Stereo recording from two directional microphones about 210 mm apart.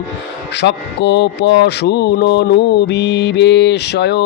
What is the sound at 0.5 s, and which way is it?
Speech, 55° left (ahead or behind).